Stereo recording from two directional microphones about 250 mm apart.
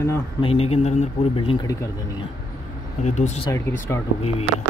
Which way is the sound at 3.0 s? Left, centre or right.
Left.